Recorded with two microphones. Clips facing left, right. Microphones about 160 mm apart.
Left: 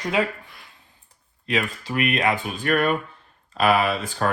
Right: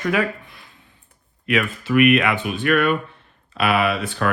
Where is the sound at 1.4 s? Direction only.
30° left (ahead or behind).